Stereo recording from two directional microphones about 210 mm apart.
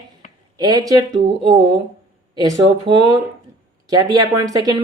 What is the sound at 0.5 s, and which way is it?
Speech, 20° right (ahead or behind).